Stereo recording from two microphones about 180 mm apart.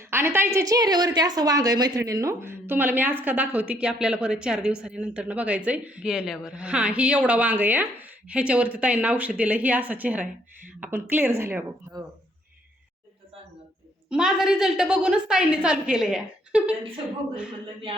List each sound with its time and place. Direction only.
0.1 s a woman's voice: 15° right (ahead or behind)
14.1 s a woman's voice: 5° right (ahead or behind)